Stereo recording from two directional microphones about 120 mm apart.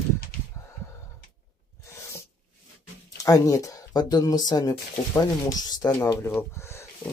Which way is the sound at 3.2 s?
30° left (ahead or behind).